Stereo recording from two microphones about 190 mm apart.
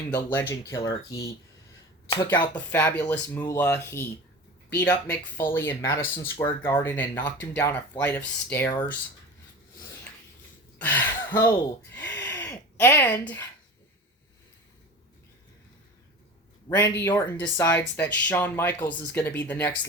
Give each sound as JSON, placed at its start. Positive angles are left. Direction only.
{"t": 0.1, "sound": "speech", "side_deg": 10}
{"t": 2.2, "sound": "speech", "side_deg": 10}
{"t": 10.8, "sound": "speech", "side_deg": 10}
{"t": 16.6, "sound": "speech", "side_deg": 15}